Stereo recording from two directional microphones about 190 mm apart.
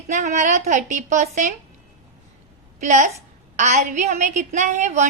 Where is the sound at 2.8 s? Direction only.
40° right (ahead or behind).